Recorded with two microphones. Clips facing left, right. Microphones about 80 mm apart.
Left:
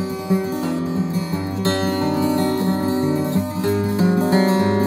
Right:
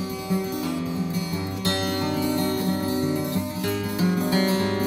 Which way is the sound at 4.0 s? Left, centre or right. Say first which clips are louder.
Left 5 dB; left.